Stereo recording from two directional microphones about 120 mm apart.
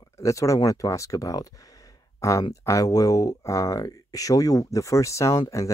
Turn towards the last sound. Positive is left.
turn(degrees=25)  # may be behind; listen again after turning